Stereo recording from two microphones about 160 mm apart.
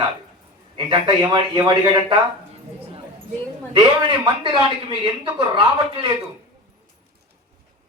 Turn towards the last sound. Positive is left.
turn(degrees=-30)  # may be behind; listen again after turning